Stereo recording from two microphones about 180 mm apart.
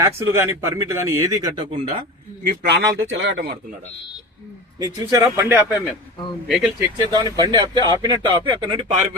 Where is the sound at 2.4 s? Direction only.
55° right (ahead or behind); by 3.5 s 85° right.